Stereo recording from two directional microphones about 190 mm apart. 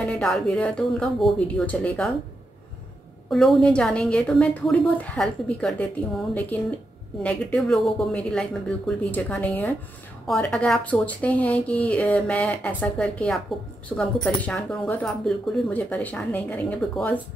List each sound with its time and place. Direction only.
0.0 s a woman's voice: centre (ahead or behind)
3.3 s a woman's voice: centre (ahead or behind)
7.2 s a woman's voice: 5° left (ahead or behind)